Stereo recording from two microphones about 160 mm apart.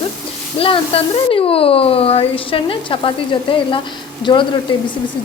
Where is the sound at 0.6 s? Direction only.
35° left (ahead or behind).